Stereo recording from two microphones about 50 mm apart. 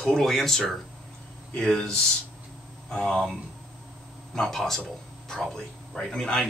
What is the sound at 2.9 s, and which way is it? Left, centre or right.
Speech, centre.